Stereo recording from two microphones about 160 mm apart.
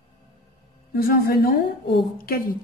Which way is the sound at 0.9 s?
65° left (ahead or behind).